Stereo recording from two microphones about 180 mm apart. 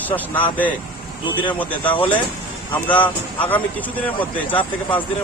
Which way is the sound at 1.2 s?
25° left (ahead or behind).